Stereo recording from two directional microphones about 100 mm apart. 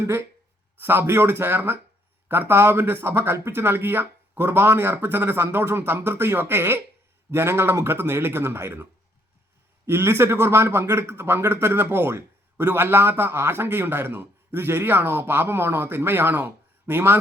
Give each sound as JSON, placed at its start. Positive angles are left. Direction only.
{"t": 0.8, "sound": "speech", "side_deg": -20}